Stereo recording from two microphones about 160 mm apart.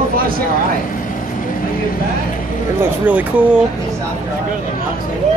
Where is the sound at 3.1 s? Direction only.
10° right (ahead or behind).